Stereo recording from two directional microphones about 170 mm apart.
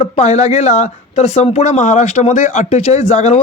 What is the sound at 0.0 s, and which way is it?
Speech, 40° left (ahead or behind).